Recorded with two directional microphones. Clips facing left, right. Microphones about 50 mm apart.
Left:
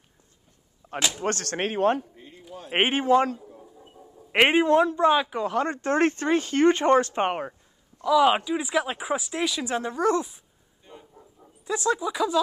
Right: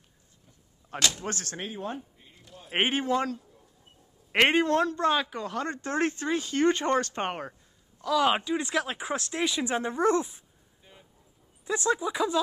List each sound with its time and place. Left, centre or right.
0.9 s speech: centre
1.2 s speech: left
2.7 s speech: left
3.8 s speech: centre
5.5 s speech: left
8.1 s speech: centre
10.1 s dog: centre
11.6 s speech: centre